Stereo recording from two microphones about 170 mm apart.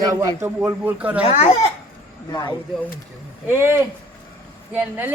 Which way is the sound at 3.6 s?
15° right (ahead or behind).